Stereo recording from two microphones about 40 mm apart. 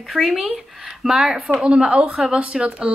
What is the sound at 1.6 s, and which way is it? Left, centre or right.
Speech, right.